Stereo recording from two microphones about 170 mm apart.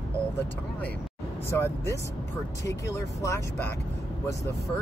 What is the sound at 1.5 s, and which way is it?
Speech, 15° left (ahead or behind).